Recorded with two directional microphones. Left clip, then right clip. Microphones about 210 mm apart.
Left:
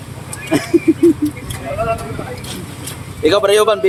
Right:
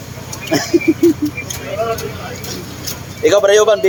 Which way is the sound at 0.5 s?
5° right (ahead or behind).